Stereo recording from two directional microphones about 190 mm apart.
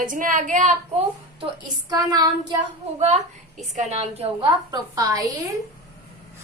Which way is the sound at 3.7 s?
35° right (ahead or behind).